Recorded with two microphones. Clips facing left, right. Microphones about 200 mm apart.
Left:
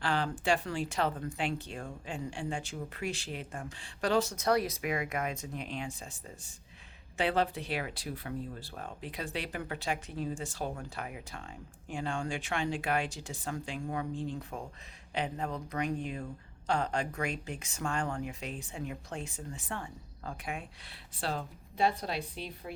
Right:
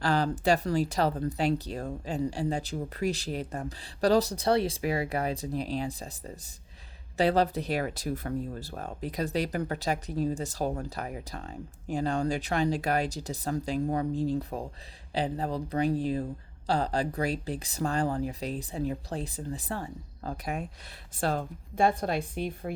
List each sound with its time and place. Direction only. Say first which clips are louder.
0.0 s speech: right 5 dB; 40° right (ahead or behind)